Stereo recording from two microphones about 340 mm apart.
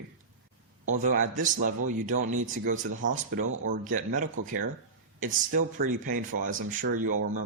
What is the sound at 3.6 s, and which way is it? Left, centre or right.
Speech, right.